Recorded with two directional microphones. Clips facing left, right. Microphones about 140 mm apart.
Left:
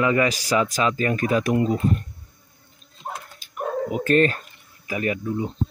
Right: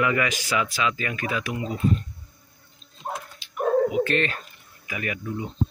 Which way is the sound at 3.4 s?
45° left (ahead or behind).